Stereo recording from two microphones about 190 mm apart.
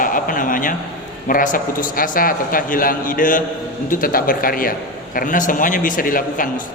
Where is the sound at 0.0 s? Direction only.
45° left (ahead or behind).